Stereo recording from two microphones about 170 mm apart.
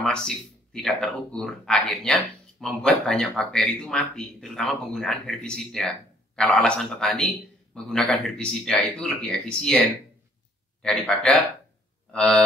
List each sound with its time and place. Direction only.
0.0 s speech: 5° left (ahead or behind)
10.8 s speech: 5° left (ahead or behind)